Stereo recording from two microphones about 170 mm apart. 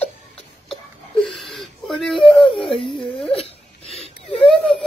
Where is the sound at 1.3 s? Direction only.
Centre (ahead or behind).